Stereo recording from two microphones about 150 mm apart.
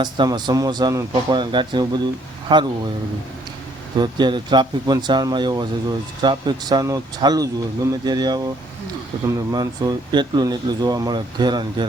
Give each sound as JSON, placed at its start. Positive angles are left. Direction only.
{"t": 0.0, "sound": "speech", "side_deg": -30}
{"t": 3.9, "sound": "speech", "side_deg": -30}
{"t": 9.5, "sound": "speech", "side_deg": -25}